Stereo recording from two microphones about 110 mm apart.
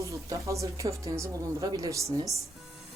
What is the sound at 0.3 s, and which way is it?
Speech, 30° right (ahead or behind).